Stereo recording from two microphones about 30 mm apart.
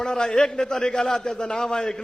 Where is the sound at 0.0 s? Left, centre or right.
Left.